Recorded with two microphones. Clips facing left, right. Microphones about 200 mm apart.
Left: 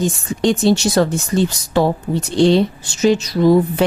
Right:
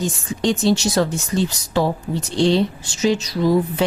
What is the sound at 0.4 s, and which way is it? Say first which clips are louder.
A woman's voice: left 3 dB; 55° left (ahead or behind).